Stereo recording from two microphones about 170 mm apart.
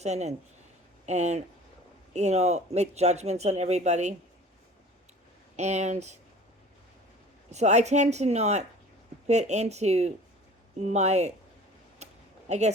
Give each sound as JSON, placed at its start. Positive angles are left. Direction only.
{"t": 0.0, "sound": "speech", "side_deg": -40}
{"t": 5.5, "sound": "speech", "side_deg": -40}
{"t": 7.5, "sound": "speech", "side_deg": -40}
{"t": 12.0, "sound": "a sound", "side_deg": -40}
{"t": 12.5, "sound": "speech", "side_deg": -40}